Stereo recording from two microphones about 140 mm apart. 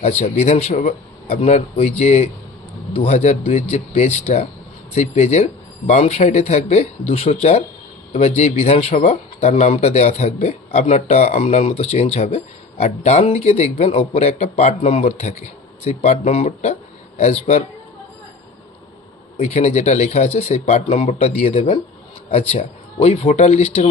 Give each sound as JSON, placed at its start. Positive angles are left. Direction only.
{"t": 0.0, "sound": "speech", "side_deg": 50}
{"t": 15.0, "sound": "speech", "side_deg": 55}
{"t": 19.4, "sound": "speech", "side_deg": 55}